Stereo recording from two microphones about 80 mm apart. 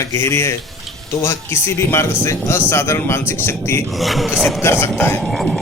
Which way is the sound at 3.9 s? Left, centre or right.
Centre.